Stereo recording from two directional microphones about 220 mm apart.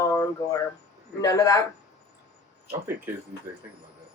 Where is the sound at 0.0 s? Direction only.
15° left (ahead or behind).